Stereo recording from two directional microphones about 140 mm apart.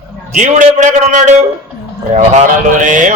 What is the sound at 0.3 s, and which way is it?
A man's voice, 65° right (ahead or behind).